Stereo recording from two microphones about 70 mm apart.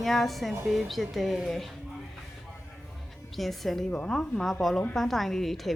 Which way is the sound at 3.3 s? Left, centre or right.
Centre.